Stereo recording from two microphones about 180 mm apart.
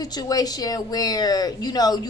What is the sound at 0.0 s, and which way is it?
Speech, 20° left (ahead or behind).